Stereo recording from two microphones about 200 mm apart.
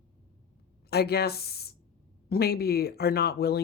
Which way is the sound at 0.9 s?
55° left (ahead or behind).